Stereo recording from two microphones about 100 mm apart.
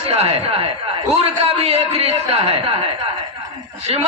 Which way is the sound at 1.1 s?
90° right.